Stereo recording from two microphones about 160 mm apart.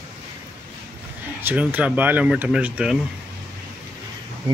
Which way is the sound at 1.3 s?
10° right (ahead or behind).